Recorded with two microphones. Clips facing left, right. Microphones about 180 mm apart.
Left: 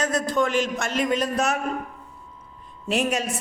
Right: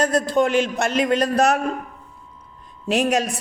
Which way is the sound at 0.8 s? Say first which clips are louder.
Right 4 dB; 70° right (ahead or behind).